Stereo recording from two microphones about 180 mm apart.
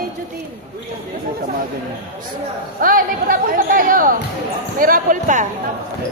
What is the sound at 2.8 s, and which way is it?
Speech, 50° right (ahead or behind).